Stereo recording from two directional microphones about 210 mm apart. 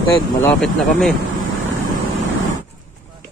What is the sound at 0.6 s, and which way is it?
Speech, centre (ahead or behind).